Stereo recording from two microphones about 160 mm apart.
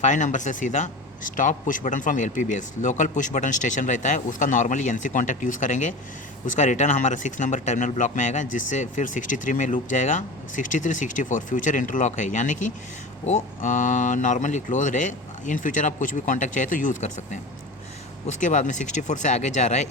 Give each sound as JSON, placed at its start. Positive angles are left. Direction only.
{"t": 0.0, "sound": "speech", "side_deg": 50}